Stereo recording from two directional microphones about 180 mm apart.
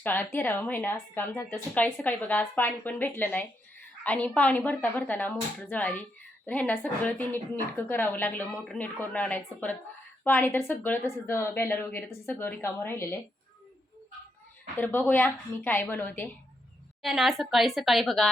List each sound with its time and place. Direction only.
0.0 s a woman's voice: 10° left (ahead or behind)
14.8 s a woman's voice: 10° left (ahead or behind)
17.0 s a woman's voice: centre (ahead or behind)